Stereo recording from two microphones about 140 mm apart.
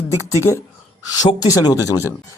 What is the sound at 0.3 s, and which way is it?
Speech, 20° left (ahead or behind).